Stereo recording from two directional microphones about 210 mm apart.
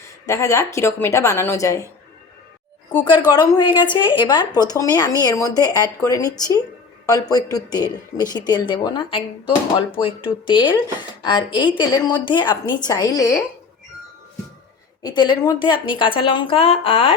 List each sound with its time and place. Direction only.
0.3 s a woman's voice: 15° left (ahead or behind)
3.0 s a woman's voice: 20° left (ahead or behind)
15.0 s a woman's voice: 20° left (ahead or behind)